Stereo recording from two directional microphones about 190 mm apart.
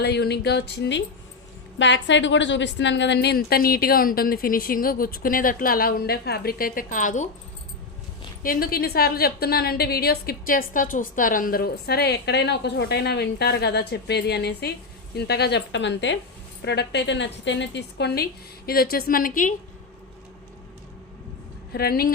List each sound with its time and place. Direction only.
0.0 s a woman's voice: 60° left (ahead or behind); by 7.3 s 40° left (ahead or behind)
8.4 s a woman's voice: 50° left (ahead or behind)
21.7 s a woman's voice: 55° left (ahead or behind)